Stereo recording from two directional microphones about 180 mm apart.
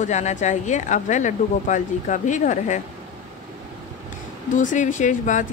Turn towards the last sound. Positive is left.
turn(degrees=45)  # may be behind; listen again after turning